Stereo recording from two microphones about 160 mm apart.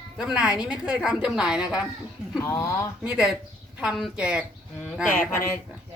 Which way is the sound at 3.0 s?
5° right (ahead or behind).